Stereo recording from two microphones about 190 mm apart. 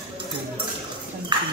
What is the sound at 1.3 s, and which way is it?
Dog, 25° right (ahead or behind).